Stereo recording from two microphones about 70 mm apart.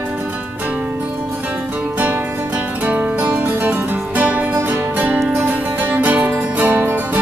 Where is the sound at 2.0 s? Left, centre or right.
Right.